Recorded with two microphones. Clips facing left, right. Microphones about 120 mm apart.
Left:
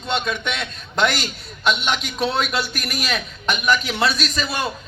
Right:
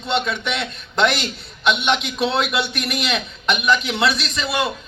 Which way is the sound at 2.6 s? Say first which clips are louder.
Right 2 dB; 25° right (ahead or behind).